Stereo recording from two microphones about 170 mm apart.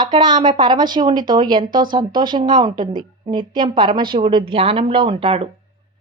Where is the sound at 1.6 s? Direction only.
55° right (ahead or behind).